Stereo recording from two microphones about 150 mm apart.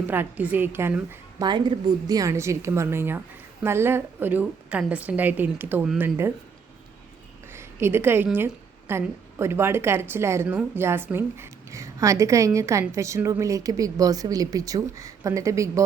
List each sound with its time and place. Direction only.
0.1 s a woman's voice: 10° right (ahead or behind)
1.4 s a woman's voice: 30° right (ahead or behind); by 6.1 s 5° right (ahead or behind)
7.5 s a woman's voice: 15° right (ahead or behind)